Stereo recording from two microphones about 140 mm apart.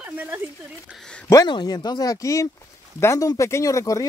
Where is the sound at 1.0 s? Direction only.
5° left (ahead or behind).